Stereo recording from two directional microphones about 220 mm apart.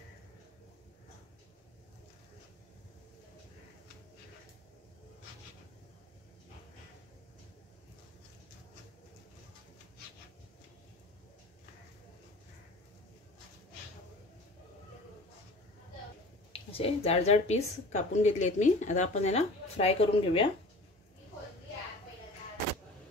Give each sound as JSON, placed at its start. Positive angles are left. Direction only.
{"t": 16.5, "sound": "a woman's voice", "side_deg": 25}